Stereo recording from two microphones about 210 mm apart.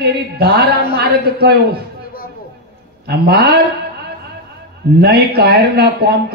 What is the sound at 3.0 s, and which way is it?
Speech, 50° right (ahead or behind).